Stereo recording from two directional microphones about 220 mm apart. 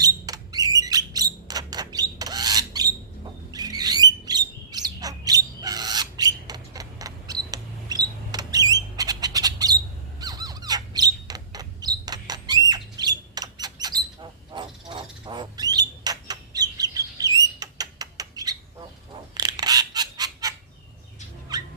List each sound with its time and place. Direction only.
0.0 s bird: 15° right (ahead or behind)
10.2 s squeak: 15° right (ahead or behind)
17.6 s rodents: 15° right (ahead or behind)
19.3 s fowl: 20° right (ahead or behind)
21.5 s a sound: 20° right (ahead or behind)